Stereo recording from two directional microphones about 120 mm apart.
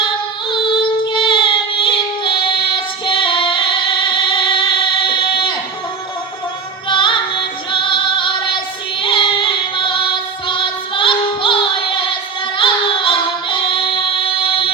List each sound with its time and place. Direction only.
1.0 s female singing: 45° left (ahead or behind)
2.7 s singing: 45° left (ahead or behind)
6.8 s music: 45° left (ahead or behind)
7.7 s female singing: 45° left (ahead or behind)
12.5 s music: 45° left (ahead or behind)